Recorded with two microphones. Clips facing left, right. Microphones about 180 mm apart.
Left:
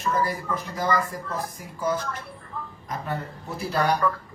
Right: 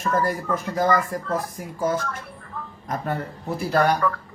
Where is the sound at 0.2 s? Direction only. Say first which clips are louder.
Right 3 dB; 50° right (ahead or behind).